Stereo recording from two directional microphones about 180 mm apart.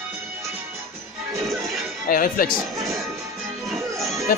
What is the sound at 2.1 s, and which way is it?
Speech, 50° left (ahead or behind).